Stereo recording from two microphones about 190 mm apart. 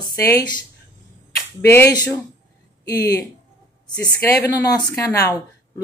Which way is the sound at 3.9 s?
20° left (ahead or behind).